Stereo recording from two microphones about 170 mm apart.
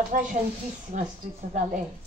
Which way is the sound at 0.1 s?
55° right (ahead or behind).